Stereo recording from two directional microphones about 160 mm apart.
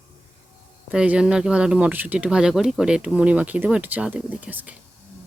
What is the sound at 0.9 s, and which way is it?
Speech, 5° right (ahead or behind).